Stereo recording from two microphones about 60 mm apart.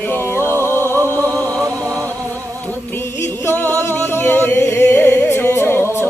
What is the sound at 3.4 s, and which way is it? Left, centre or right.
Music, left.